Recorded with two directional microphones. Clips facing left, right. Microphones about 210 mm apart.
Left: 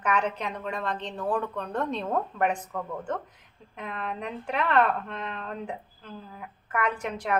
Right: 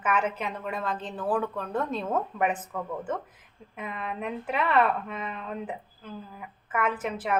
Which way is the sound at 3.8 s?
5° right (ahead or behind).